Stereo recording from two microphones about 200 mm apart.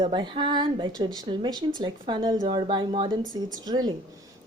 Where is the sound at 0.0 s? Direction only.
25° right (ahead or behind).